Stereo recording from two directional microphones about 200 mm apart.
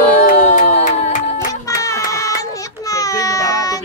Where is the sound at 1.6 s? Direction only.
15° left (ahead or behind).